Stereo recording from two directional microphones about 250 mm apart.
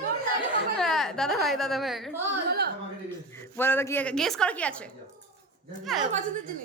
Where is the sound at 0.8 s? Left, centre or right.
Centre.